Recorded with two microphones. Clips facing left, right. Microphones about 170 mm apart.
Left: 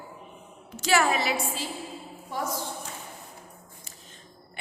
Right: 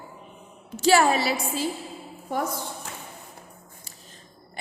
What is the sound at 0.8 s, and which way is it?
Speech, 30° right (ahead or behind).